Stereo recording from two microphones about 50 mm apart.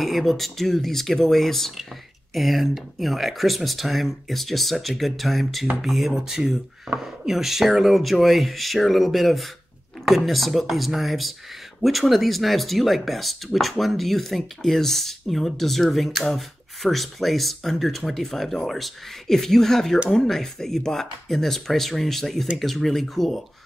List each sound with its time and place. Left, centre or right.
0.0 s speech: centre